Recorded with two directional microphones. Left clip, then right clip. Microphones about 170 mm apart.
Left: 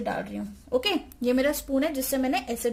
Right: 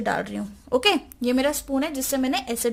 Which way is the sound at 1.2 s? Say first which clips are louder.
Right 1 dB; 40° right (ahead or behind).